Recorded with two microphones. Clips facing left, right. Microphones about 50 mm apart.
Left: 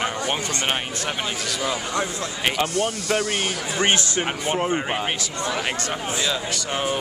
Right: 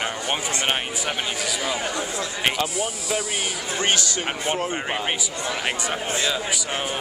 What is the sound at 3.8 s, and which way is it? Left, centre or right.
Speech, left.